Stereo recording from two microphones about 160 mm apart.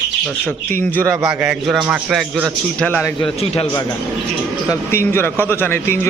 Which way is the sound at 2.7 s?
10° left (ahead or behind).